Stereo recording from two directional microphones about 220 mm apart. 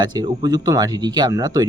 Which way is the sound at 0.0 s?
20° right (ahead or behind).